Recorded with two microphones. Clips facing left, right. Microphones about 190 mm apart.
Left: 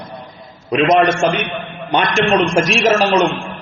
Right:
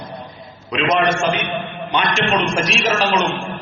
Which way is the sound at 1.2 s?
Centre (ahead or behind).